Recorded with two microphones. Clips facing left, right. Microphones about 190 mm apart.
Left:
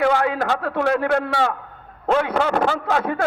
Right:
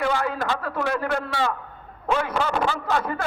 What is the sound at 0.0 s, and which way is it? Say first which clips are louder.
A man's voice: left 5 dB; 60° left (ahead or behind).